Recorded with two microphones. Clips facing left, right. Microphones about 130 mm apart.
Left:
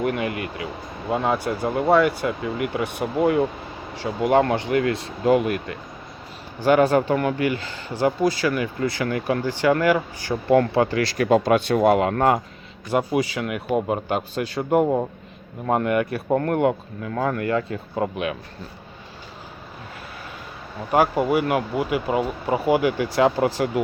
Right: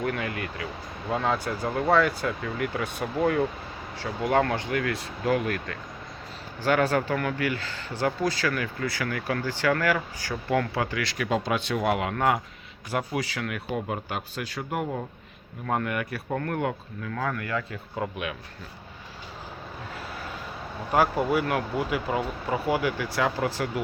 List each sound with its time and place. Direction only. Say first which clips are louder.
0.0 s speech: left 5 dB; 20° left (ahead or behind)
10.5 s speech: left 9 dB; 30° left (ahead or behind)
12.9 s speech: left 7 dB; 20° left (ahead or behind)
16.3 s speech: left 9 dB; 35° left (ahead or behind)
20.9 s speech: left 4 dB; 15° left (ahead or behind)